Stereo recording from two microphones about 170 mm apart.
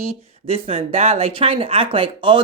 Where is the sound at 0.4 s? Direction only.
35° right (ahead or behind).